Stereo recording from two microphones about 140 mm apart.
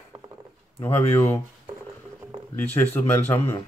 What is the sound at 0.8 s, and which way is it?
Speech, 15° left (ahead or behind).